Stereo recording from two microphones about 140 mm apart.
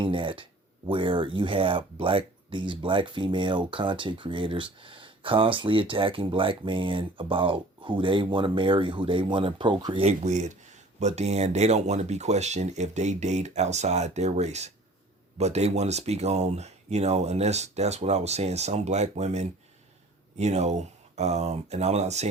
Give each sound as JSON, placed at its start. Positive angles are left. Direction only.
{"t": 0.0, "sound": "speech", "side_deg": -35}
{"t": 10.1, "sound": "speech", "side_deg": -55}